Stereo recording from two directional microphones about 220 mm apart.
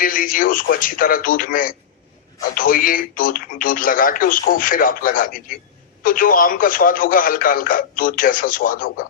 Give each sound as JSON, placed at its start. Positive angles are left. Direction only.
{"t": 0.0, "sound": "speech", "side_deg": 40}